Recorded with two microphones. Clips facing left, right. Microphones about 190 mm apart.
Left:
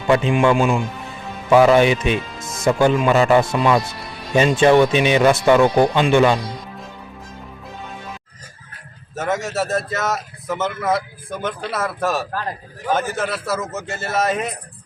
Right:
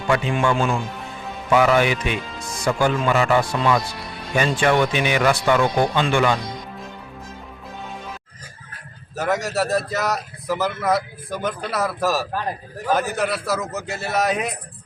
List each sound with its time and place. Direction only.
0.1 s a man's voice: 20° left (ahead or behind)
9.1 s a man's voice: centre (ahead or behind)